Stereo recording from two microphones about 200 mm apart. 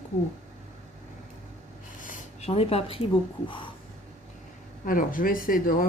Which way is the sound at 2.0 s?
40° left (ahead or behind).